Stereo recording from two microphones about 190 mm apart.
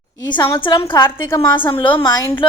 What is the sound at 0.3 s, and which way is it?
A woman's voice, 25° left (ahead or behind).